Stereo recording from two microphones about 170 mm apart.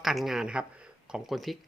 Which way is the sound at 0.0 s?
Centre (ahead or behind).